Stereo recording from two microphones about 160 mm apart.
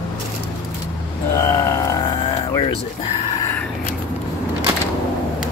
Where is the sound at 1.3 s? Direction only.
20° left (ahead or behind).